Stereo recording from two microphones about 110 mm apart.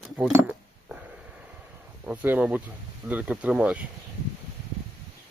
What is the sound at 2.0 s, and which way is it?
Speech, 15° right (ahead or behind).